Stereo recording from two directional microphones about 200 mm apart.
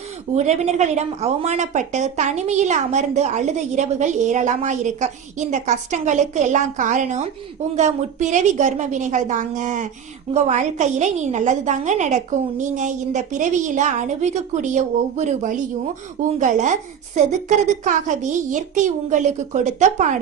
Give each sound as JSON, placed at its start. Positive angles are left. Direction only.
{"t": 0.3, "sound": "a woman's voice", "side_deg": -35}